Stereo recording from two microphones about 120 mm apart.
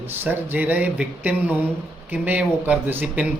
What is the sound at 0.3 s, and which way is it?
Speech, 15° right (ahead or behind).